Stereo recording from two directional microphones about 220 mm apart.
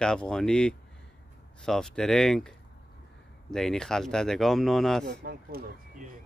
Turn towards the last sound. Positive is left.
turn(degrees=-40)  # may be behind; listen again after turning